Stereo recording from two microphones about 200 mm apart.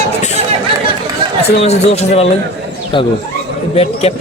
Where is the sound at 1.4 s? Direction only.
30° left (ahead or behind).